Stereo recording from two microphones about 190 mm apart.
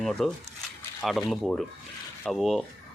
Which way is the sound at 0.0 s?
Centre (ahead or behind).